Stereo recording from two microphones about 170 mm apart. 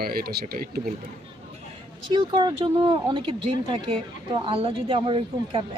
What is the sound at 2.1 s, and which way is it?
Speech, 30° right (ahead or behind).